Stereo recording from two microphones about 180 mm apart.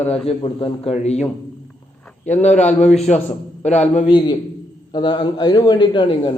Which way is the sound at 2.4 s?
40° left (ahead or behind).